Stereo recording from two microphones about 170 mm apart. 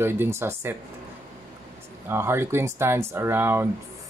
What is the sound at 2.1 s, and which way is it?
Speech, 15° right (ahead or behind).